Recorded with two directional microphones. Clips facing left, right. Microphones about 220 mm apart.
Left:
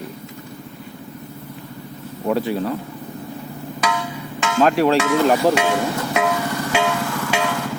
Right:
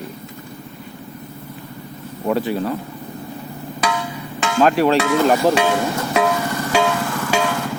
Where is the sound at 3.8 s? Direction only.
35° right (ahead or behind).